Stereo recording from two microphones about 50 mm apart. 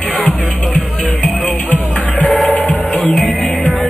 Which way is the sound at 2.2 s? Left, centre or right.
Centre.